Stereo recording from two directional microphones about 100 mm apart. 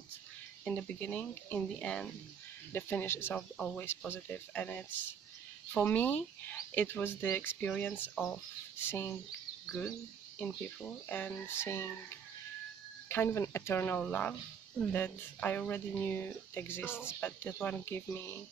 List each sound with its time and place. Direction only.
0.7 s speech: 15° left (ahead or behind)
2.7 s speech: 20° left (ahead or behind)
3.3 s speech: 10° left (ahead or behind)
8.7 s a sound: 20° left (ahead or behind)
11.1 s speech: 15° left (ahead or behind)
16.9 s speech: 10° right (ahead or behind)
17.2 s speech: 20° left (ahead or behind)